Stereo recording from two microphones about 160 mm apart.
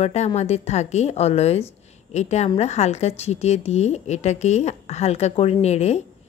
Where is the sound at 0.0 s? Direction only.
40° left (ahead or behind).